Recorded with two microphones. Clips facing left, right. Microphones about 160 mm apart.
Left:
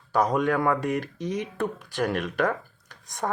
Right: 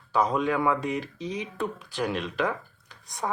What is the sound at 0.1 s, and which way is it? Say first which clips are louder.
Speech: left 2 dB; 45° left (ahead or behind).